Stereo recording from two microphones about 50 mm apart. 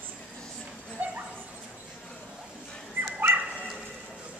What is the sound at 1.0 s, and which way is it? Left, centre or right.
Dog, right.